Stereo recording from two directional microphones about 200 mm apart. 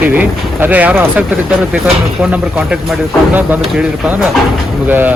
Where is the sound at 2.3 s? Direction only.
5° right (ahead or behind).